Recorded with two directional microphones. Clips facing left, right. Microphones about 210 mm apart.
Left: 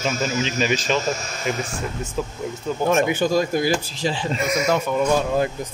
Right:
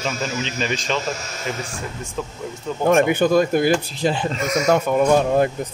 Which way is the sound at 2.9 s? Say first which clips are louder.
Right 4 dB; 55° right (ahead or behind).